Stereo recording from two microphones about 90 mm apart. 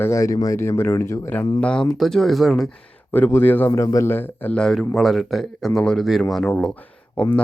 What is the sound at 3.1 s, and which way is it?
Speech, 20° left (ahead or behind).